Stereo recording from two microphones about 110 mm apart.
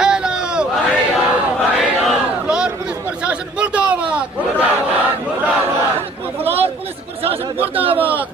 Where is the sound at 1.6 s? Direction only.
Centre (ahead or behind).